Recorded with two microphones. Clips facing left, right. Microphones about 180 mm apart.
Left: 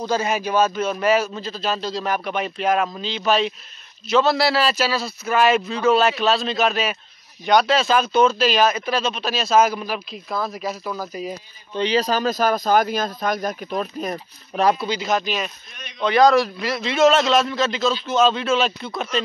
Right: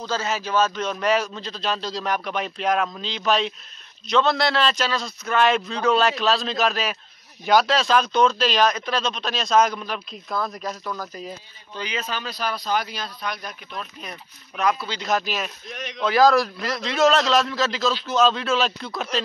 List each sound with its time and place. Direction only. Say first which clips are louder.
0.0 s speech: left 5 dB; 15° left (ahead or behind)
11.7 s speech: left 10 dB; 30° left (ahead or behind)
15.0 s speech: left 2 dB; centre (ahead or behind)